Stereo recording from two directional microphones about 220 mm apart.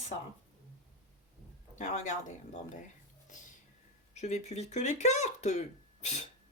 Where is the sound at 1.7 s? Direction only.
35° left (ahead or behind).